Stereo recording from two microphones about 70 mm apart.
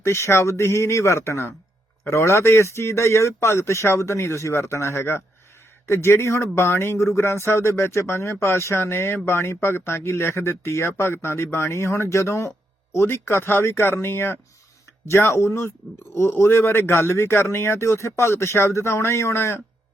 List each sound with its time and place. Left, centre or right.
0.0 s speech: left